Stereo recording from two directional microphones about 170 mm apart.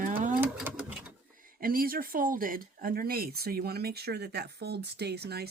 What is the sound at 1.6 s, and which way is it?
Speech, 60° right (ahead or behind).